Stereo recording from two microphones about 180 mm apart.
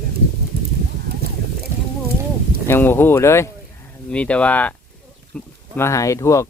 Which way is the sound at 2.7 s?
10° left (ahead or behind).